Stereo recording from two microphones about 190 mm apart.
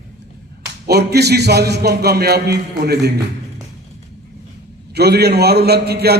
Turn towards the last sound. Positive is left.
turn(degrees=-55)  # may be behind; listen again after turning